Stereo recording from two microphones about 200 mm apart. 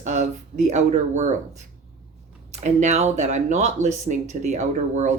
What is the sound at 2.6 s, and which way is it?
Speech, 35° right (ahead or behind).